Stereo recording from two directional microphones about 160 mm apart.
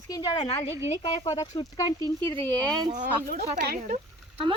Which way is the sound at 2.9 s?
60° right (ahead or behind).